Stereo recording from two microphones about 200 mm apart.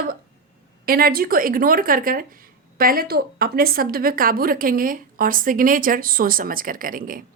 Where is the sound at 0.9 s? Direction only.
50° right (ahead or behind).